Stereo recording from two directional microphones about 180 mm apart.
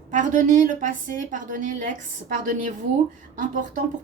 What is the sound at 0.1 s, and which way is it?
A woman's voice, 45° right (ahead or behind).